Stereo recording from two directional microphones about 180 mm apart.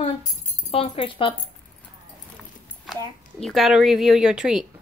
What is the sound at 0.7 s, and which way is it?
Speech, 30° left (ahead or behind).